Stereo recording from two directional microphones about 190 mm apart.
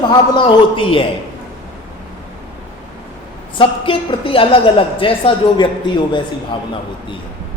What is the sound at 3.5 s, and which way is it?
A woman's voice, 30° left (ahead or behind).